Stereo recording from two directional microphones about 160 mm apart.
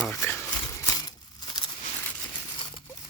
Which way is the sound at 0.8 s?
25° left (ahead or behind).